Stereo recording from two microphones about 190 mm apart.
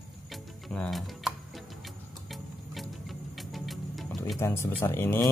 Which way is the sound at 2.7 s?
Centre (ahead or behind).